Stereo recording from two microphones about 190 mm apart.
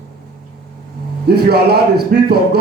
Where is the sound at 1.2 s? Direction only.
55° right (ahead or behind).